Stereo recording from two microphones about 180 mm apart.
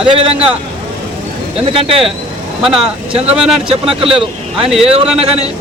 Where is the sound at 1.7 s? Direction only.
30° right (ahead or behind).